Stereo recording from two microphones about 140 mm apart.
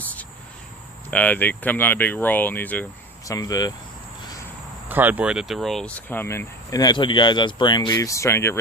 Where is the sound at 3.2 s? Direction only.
25° left (ahead or behind).